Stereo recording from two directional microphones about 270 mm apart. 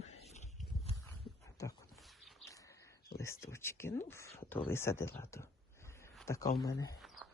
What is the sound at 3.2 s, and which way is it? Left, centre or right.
Speech, centre.